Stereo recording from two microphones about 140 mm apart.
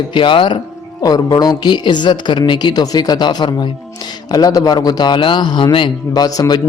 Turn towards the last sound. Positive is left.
turn(degrees=25)  # may be behind; listen again after turning